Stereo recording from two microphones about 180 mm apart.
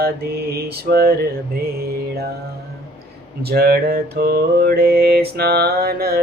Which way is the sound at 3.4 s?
60° right (ahead or behind).